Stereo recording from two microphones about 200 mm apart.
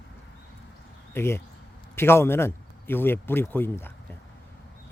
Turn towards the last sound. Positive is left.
turn(degrees=10)  # may be behind; listen again after turning